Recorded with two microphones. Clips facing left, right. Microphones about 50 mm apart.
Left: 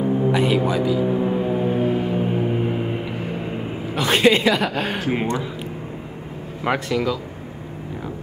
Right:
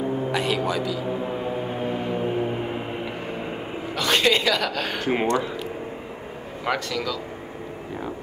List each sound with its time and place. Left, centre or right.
0.3 s music: centre
3.9 s a woman's voice: centre
5.0 s speech: centre
6.6 s speech: centre